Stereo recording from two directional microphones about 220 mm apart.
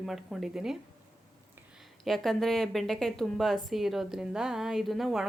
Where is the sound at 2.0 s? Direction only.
Centre (ahead or behind).